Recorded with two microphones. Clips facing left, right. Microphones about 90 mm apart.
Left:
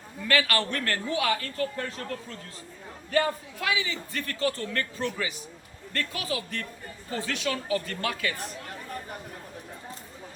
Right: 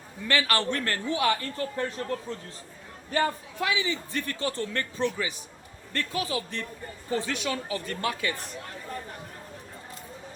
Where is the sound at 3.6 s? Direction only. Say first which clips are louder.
Right 2 dB; 25° right (ahead or behind).